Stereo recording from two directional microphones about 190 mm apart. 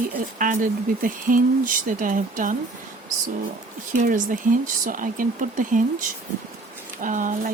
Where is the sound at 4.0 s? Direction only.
45° right (ahead or behind).